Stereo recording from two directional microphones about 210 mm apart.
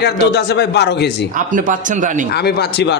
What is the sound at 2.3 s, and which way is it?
Speech, 50° left (ahead or behind).